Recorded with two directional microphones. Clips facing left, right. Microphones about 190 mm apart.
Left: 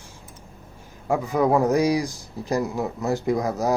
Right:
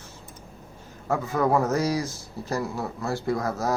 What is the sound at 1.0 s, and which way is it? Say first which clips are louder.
A man's voice: left 3 dB; 15° left (ahead or behind).